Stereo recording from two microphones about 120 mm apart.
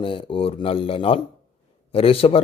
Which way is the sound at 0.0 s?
45° left (ahead or behind).